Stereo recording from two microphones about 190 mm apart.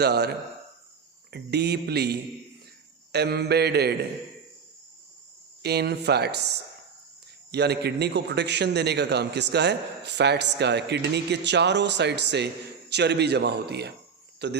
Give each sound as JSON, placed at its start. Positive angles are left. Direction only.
{"t": 0.0, "sound": "a man's voice", "side_deg": -60}
{"t": 1.3, "sound": "a man's voice", "side_deg": -60}
{"t": 5.6, "sound": "a man's voice", "side_deg": -60}